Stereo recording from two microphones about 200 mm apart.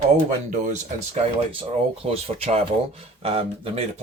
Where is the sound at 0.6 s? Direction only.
35° right (ahead or behind).